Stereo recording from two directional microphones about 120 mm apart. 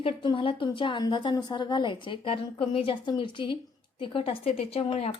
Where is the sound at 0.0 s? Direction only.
45° left (ahead or behind).